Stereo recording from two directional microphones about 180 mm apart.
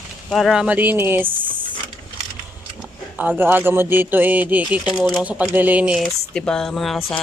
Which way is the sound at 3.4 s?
10° right (ahead or behind).